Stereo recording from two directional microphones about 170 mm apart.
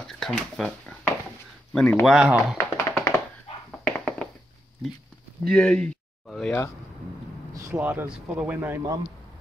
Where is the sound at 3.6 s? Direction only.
5° left (ahead or behind).